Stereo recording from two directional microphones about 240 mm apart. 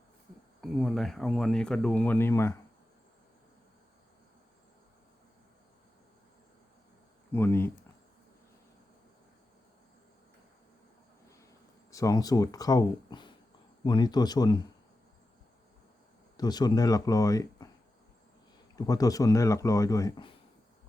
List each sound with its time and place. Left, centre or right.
0.6 s speech: centre
7.3 s speech: centre
11.9 s speech: centre
16.4 s speech: centre
18.8 s speech: centre